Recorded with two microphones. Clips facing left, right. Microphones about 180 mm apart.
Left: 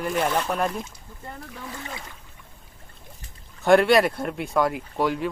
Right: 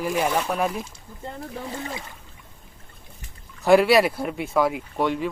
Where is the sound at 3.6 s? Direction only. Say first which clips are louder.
Right 1 dB; centre (ahead or behind).